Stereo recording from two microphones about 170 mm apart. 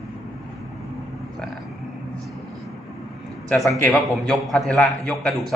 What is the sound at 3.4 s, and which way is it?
A man's voice, centre (ahead or behind).